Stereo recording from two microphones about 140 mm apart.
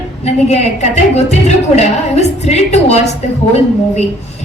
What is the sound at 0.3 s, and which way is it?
A woman's voice, 50° left (ahead or behind).